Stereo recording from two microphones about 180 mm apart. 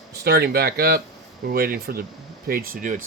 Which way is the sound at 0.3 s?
60° right (ahead or behind).